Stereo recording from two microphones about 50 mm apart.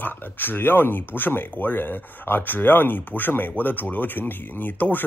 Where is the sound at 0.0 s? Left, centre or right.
Left.